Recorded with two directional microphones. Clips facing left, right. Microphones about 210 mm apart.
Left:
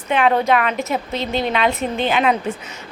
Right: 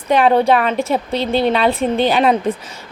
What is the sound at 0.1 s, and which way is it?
A woman's voice, 35° right (ahead or behind).